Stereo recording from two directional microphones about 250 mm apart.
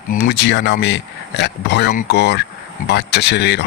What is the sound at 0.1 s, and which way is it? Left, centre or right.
Speech, left.